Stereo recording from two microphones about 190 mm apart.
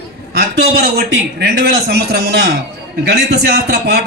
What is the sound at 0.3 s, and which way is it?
A man's voice, 55° right (ahead or behind).